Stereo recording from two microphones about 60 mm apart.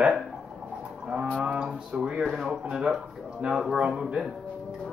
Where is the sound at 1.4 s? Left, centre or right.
Centre.